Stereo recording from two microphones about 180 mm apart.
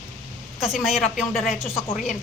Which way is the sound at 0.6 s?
Centre (ahead or behind).